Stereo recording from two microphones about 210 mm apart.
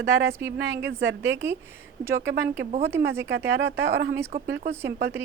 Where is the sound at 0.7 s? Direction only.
10° right (ahead or behind).